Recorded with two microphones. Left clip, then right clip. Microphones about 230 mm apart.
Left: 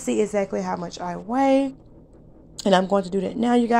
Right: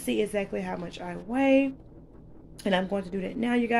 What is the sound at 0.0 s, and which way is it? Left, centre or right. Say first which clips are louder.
A woman's voice: left 6 dB; centre.